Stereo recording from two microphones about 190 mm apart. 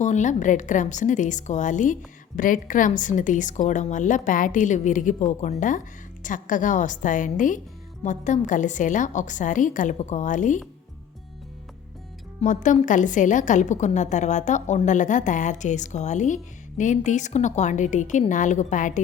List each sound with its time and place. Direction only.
0.0 s a woman's voice: 40° left (ahead or behind)
12.4 s a woman's voice: 40° left (ahead or behind)